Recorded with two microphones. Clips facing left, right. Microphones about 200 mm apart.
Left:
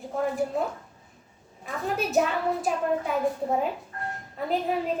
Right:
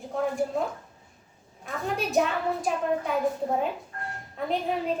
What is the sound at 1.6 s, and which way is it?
A woman's voice, centre (ahead or behind).